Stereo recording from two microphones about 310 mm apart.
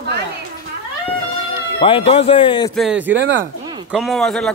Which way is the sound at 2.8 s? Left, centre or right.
Centre.